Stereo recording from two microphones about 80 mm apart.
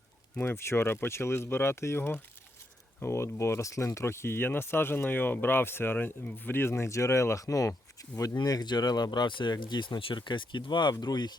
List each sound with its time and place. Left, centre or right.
0.4 s speech: left
8.4 s speech: left